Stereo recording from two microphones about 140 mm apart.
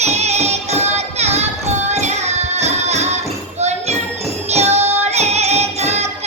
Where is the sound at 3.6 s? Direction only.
50° right (ahead or behind).